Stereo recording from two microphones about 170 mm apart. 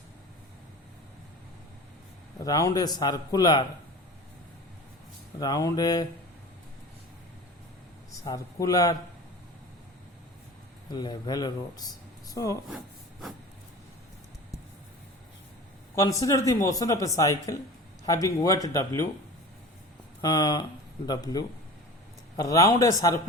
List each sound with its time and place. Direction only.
2.4 s speech: 20° left (ahead or behind)
5.4 s speech: 20° left (ahead or behind)
8.2 s speech: 20° left (ahead or behind)
10.9 s speech: 25° left (ahead or behind)
16.0 s speech: 20° left (ahead or behind)
20.2 s speech: 25° left (ahead or behind)